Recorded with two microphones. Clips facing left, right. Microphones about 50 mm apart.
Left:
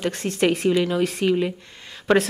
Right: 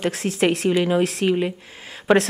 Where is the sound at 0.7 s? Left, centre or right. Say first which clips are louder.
Right 2 dB; centre.